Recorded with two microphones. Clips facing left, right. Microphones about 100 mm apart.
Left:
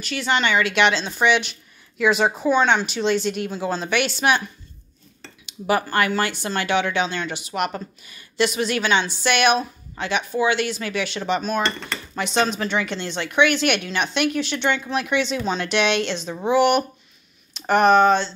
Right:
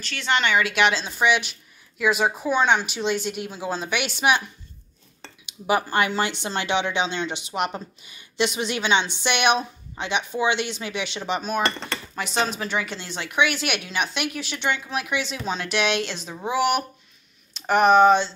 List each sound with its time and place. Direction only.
0.0 s a woman's voice: 5° left (ahead or behind); by 4.4 s 10° right (ahead or behind)
5.4 s a woman's voice: 15° right (ahead or behind)